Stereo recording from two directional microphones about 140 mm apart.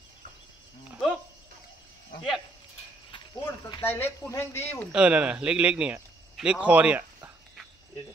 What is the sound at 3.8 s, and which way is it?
Speech, 15° left (ahead or behind).